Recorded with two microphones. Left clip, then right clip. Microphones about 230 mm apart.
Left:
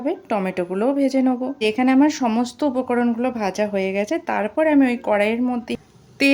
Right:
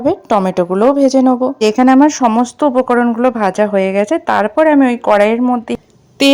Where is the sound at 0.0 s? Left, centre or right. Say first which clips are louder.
Right 10 dB; right.